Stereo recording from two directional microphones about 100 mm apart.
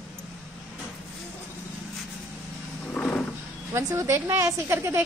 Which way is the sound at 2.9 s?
10° left (ahead or behind).